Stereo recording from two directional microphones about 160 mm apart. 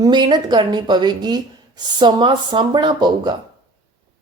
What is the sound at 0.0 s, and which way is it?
Speech, 25° right (ahead or behind).